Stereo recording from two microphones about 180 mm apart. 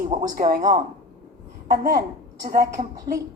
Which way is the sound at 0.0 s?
40° right (ahead or behind).